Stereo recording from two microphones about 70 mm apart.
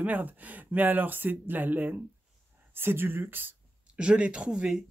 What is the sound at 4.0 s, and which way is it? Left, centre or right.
Speech, centre.